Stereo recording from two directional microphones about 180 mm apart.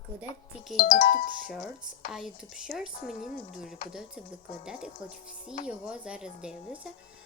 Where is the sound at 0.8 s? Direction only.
50° left (ahead or behind).